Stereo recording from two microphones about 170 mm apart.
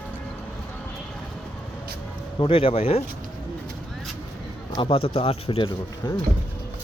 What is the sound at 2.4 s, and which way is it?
Speech, 35° left (ahead or behind).